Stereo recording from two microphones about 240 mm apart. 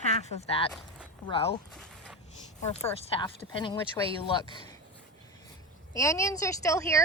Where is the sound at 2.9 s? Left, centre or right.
Left.